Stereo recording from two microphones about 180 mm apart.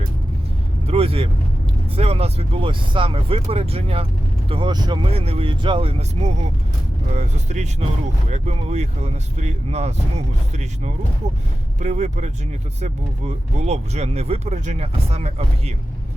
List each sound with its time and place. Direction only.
0.9 s vehicle: 30° right (ahead or behind)
2.0 s speech: 35° right (ahead or behind)
11.8 s speech: 40° right (ahead or behind)